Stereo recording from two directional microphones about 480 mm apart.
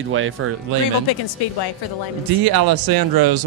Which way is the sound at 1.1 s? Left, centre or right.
Left.